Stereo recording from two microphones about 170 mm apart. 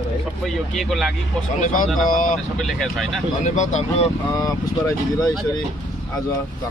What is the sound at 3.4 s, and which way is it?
Speech, 45° left (ahead or behind).